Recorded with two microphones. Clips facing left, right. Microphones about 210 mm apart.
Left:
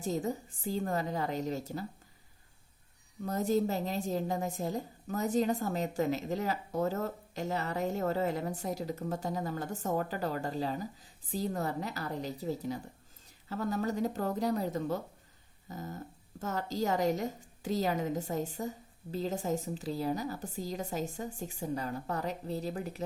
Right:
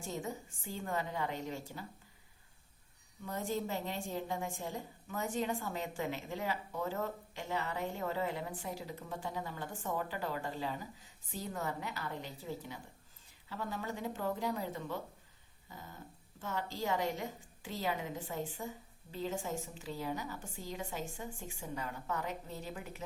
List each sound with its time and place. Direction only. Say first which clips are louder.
0.0 s a woman's voice: left 7 dB; 40° left (ahead or behind)
3.2 s a woman's voice: left 8 dB; 40° left (ahead or behind)
15.7 s a sound: left 9 dB; 40° left (ahead or behind)
16.4 s a woman's voice: left 5 dB; 40° left (ahead or behind)